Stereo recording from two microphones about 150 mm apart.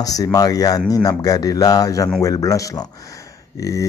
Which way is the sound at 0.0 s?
25° left (ahead or behind).